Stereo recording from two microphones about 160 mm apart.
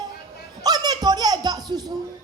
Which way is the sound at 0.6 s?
25° right (ahead or behind).